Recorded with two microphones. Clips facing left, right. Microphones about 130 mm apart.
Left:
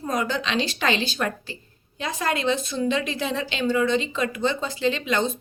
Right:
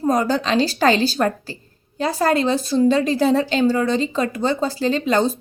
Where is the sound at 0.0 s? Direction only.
40° right (ahead or behind).